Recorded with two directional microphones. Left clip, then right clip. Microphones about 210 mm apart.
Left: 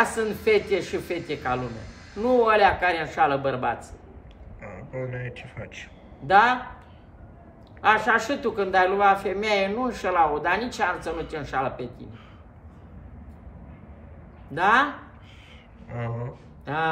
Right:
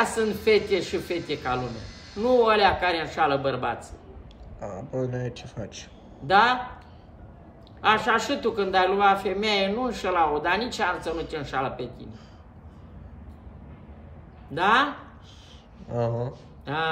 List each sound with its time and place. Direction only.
0.0 s a man's voice: centre (ahead or behind)
5.1 s speech: 25° right (ahead or behind)
6.2 s a man's voice: centre (ahead or behind)
7.8 s a man's voice: centre (ahead or behind)
14.5 s a man's voice: centre (ahead or behind)
16.0 s speech: 15° right (ahead or behind)
16.6 s speech: centre (ahead or behind)